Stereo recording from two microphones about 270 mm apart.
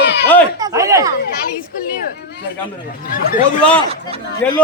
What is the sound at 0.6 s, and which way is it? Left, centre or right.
Speech, centre.